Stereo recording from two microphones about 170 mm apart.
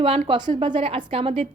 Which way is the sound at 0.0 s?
30° right (ahead or behind).